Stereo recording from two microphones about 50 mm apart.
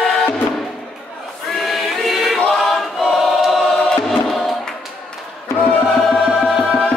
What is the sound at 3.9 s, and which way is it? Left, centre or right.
Music, centre.